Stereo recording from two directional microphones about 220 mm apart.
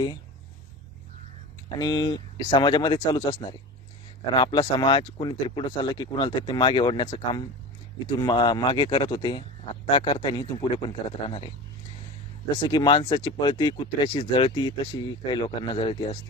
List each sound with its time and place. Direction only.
1.8 s speech: 20° left (ahead or behind)
4.4 s speech: 20° left (ahead or behind)
12.5 s speech: 20° left (ahead or behind)